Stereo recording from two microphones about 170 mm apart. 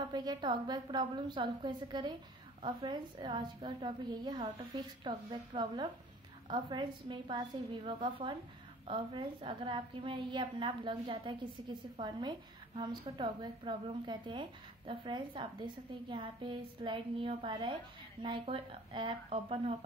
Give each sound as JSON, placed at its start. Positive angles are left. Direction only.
{"t": 0.0, "sound": "a woman's voice", "side_deg": -25}